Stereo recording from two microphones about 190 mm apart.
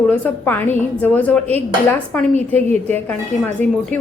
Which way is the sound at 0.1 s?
10° left (ahead or behind).